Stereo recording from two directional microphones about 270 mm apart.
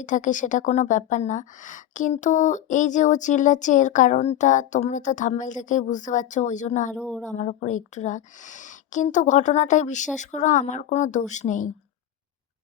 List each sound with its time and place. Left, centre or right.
0.0 s a woman's voice: left
6.9 s speech: centre
7.3 s a woman's voice: left